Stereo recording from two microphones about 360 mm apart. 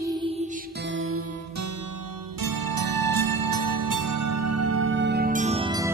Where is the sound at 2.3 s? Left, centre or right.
Right; by 5.9 s centre.